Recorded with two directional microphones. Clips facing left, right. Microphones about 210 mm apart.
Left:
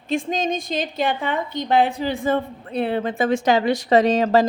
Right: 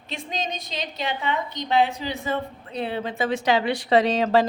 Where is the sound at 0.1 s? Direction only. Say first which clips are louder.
Left 9 dB; 50° left (ahead or behind).